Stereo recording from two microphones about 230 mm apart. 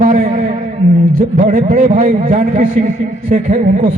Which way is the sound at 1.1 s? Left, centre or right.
Right.